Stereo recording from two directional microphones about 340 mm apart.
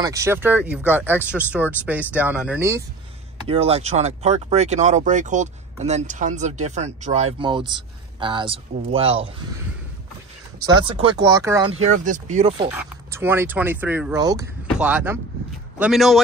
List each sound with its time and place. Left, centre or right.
0.0 s speech: centre
3.4 s speech: centre
10.6 s speech: centre
11.9 s speech: right; by 16.2 s centre